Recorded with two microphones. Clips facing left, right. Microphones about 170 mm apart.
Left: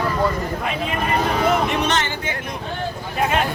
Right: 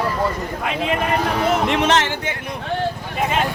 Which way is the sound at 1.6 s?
90° right.